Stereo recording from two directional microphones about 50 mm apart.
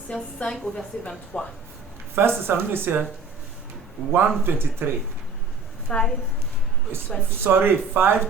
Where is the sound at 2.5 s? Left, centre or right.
Right.